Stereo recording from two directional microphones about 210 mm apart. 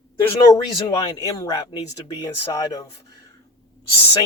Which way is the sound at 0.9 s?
15° left (ahead or behind).